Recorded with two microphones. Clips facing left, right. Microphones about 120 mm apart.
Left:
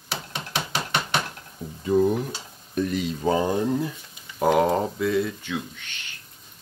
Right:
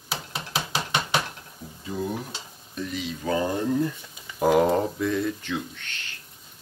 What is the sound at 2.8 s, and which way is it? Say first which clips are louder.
Speech: left 7 dB; 50° left (ahead or behind).